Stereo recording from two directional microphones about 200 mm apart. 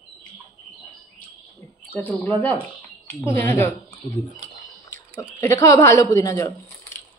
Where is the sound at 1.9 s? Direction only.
5° left (ahead or behind).